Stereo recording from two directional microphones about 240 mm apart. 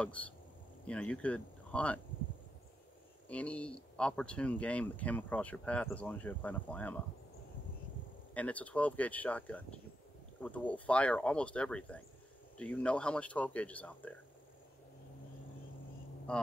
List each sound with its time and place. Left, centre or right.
0.0 s speech: centre
3.3 s speech: centre
8.4 s speech: centre
16.3 s speech: centre